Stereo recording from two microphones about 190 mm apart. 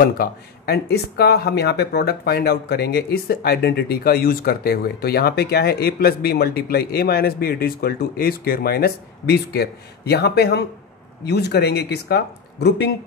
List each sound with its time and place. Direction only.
0.0 s speech: 55° left (ahead or behind)